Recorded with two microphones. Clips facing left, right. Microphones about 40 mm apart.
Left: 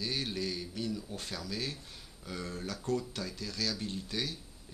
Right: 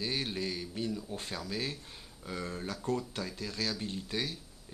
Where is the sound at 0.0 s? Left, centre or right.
Right.